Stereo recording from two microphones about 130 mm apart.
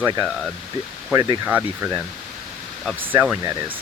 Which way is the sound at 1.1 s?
30° right (ahead or behind).